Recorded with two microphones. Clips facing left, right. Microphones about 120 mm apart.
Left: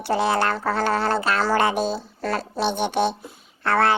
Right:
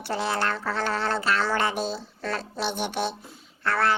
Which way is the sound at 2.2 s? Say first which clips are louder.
Left 5 dB; 45° left (ahead or behind).